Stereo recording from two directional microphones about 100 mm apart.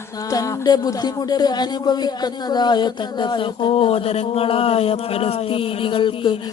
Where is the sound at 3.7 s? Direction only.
75° left (ahead or behind); by 6.4 s 55° left (ahead or behind).